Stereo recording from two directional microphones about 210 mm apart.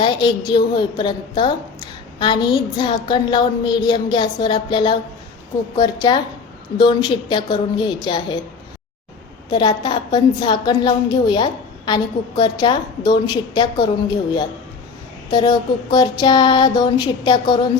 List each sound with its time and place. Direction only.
0.0 s a woman's voice: 20° left (ahead or behind)
9.5 s a woman's voice: 20° left (ahead or behind)
15.3 s a woman's voice: 20° left (ahead or behind)